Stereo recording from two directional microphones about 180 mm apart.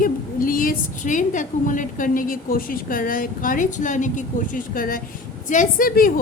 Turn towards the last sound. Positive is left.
turn(degrees=50)  # may be behind; listen again after turning